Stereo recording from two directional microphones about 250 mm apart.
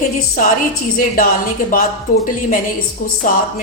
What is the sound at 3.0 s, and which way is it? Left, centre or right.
Speech, left.